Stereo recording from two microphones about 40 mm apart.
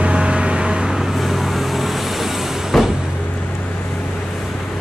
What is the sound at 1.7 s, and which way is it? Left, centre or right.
Vehicle, centre.